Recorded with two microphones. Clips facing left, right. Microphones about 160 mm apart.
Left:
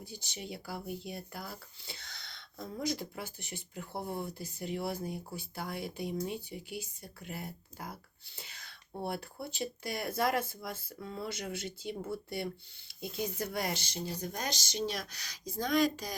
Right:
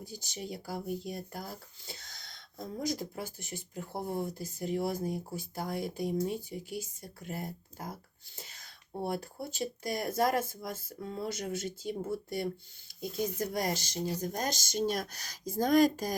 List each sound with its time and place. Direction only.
0.0 s speech: 40° right (ahead or behind)